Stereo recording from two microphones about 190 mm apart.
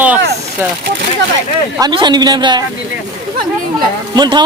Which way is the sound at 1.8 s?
25° right (ahead or behind).